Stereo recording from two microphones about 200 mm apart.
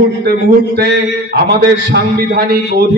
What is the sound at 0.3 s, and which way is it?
A man's voice, 55° right (ahead or behind).